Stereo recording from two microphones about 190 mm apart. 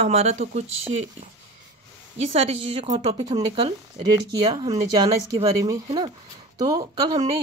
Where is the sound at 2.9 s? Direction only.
20° right (ahead or behind).